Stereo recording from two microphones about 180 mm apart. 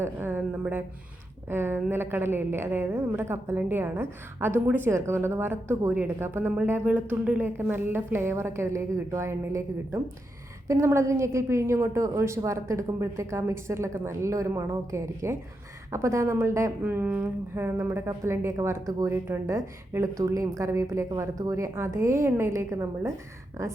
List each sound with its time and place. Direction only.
0.0 s a woman's voice: 10° right (ahead or behind)